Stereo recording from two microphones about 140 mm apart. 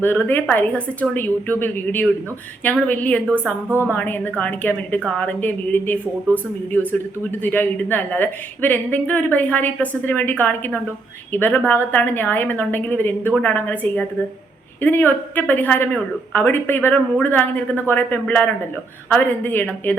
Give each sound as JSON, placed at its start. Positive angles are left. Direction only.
{"t": 0.0, "sound": "speech", "side_deg": 15}
{"t": 3.7, "sound": "a woman's voice", "side_deg": -15}
{"t": 3.9, "sound": "speech", "side_deg": 10}